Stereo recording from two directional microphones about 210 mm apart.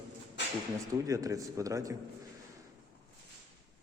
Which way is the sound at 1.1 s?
15° right (ahead or behind).